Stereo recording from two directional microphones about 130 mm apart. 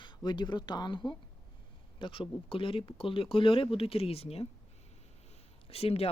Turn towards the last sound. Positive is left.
turn(degrees=50)  # may be behind; listen again after turning